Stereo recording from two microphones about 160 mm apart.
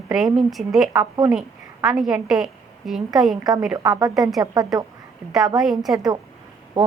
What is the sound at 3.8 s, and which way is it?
Speech, 20° right (ahead or behind).